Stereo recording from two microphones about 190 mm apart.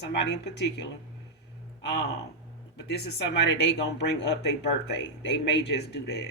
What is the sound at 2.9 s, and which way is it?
Speech, 65° left (ahead or behind).